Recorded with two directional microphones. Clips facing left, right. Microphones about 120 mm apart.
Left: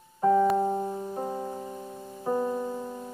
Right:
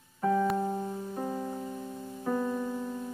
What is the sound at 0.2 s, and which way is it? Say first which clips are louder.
Keyboard: left 5 dB; 25° left (ahead or behind).